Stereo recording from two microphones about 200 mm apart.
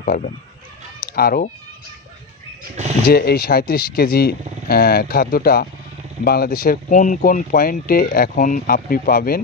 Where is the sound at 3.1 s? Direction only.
50° left (ahead or behind).